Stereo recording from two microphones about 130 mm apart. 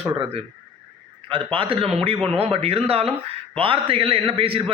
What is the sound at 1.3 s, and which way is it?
A man's voice, 40° right (ahead or behind).